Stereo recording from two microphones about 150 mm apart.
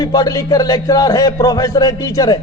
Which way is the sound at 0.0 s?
25° left (ahead or behind).